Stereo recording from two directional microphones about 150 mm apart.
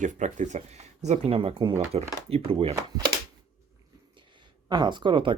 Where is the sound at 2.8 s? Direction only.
25° right (ahead or behind).